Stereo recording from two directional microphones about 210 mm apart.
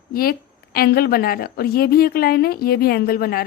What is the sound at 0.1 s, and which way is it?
A woman's voice, 45° left (ahead or behind).